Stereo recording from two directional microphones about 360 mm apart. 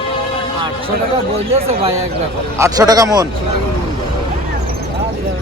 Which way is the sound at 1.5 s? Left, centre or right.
Centre.